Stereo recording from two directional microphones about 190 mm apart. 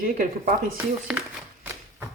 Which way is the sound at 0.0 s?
50° right (ahead or behind).